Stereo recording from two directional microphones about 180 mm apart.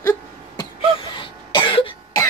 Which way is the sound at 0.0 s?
20° left (ahead or behind).